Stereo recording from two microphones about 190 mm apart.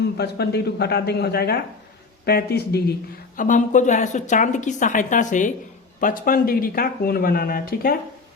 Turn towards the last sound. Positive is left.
turn(degrees=50)  # may be behind; listen again after turning